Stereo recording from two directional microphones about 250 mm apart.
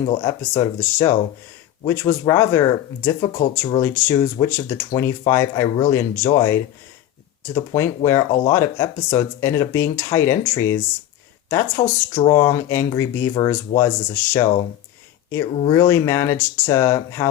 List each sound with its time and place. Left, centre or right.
0.0 s speech: centre